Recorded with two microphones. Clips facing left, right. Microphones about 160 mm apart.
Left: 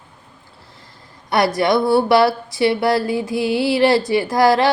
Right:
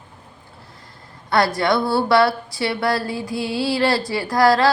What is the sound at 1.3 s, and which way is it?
A woman's voice, 20° left (ahead or behind).